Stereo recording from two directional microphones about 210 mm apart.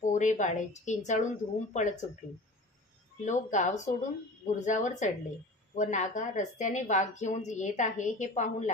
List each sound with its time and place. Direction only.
0.0 s a woman's voice: 35° left (ahead or behind)
3.3 s a woman's voice: 35° left (ahead or behind)